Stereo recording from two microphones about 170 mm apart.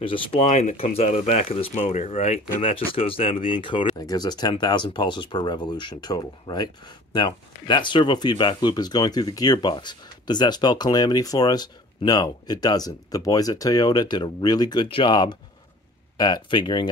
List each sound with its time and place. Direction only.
0.0 s speech: 35° left (ahead or behind)